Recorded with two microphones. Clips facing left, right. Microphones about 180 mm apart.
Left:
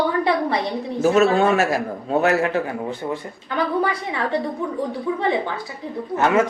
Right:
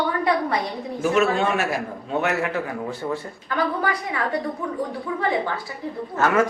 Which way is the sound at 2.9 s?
15° left (ahead or behind).